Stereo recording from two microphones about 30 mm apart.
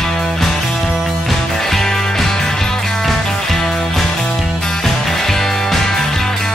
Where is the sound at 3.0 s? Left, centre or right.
Centre.